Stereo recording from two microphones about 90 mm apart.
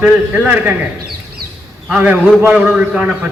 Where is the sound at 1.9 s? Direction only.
15° right (ahead or behind).